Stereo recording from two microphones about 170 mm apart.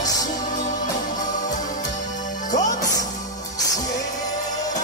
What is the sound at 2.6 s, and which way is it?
Music, 20° left (ahead or behind).